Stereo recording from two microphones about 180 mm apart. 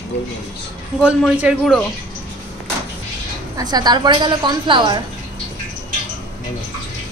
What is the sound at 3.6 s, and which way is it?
A woman's voice, 20° right (ahead or behind).